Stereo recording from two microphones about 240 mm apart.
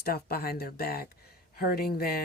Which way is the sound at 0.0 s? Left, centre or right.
Left.